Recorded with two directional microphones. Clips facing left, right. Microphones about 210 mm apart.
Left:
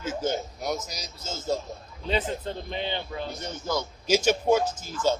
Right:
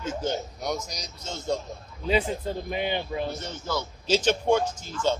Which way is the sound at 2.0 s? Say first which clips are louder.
Right 3 dB; 10° right (ahead or behind).